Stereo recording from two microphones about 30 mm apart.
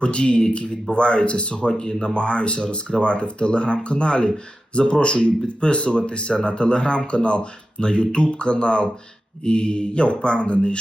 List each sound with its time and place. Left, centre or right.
0.0 s speech: left
1.8 s speech: left
2.1 s speech: left